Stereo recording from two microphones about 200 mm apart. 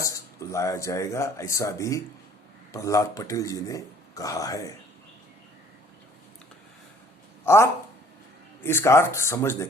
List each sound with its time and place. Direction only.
0.5 s speech: 15° left (ahead or behind)
7.4 s speech: 10° left (ahead or behind)